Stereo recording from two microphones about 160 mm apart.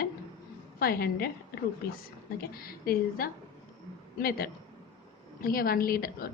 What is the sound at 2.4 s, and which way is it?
A woman's voice, 70° left (ahead or behind).